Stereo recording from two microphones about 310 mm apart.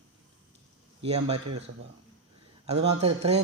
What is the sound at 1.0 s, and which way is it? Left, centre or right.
Speech, centre.